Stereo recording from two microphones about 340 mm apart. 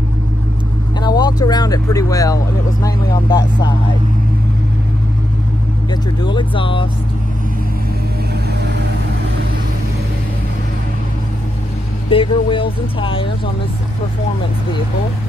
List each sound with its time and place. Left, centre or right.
1.0 s speech: centre
5.9 s speech: centre
8.5 s vehicle: right
12.1 s speech: centre